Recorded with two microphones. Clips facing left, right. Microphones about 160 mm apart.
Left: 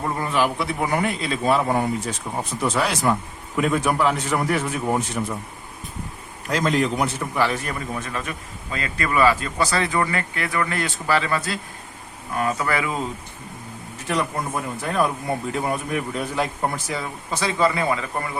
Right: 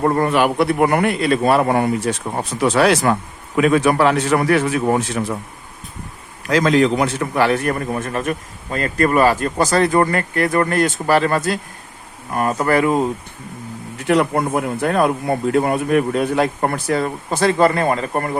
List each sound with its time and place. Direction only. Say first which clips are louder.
0.0 s a man's voice: right 7 dB; 65° right (ahead or behind); by 5.2 s 90° right
6.5 s a man's voice: right 7 dB; 90° right; by 13.1 s 50° right (ahead or behind)
14.1 s speech: right 8 dB; 65° right (ahead or behind)